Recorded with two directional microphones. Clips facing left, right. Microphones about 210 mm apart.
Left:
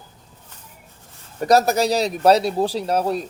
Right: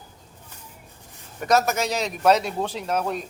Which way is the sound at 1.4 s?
35° left (ahead or behind).